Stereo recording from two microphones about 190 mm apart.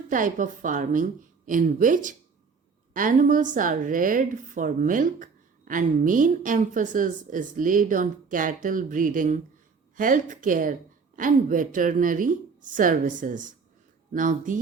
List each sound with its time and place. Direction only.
0.1 s a woman's voice: 45° right (ahead or behind)